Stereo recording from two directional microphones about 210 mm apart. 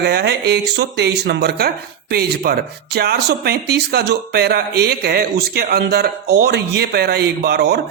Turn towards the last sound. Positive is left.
turn(degrees=-50)  # may be behind; listen again after turning